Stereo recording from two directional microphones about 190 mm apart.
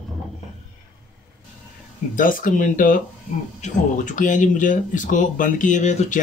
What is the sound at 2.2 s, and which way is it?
Speech, 45° left (ahead or behind).